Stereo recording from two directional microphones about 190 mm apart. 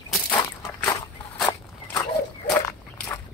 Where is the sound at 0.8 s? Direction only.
5° left (ahead or behind).